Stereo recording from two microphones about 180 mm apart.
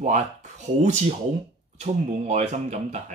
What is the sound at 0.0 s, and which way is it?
Speech, 40° right (ahead or behind).